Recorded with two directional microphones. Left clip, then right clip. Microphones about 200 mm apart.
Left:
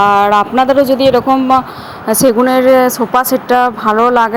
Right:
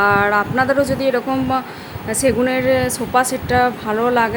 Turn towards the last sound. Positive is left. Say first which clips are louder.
# left 7 dB
turn(degrees=15)  # may be behind; listen again after turning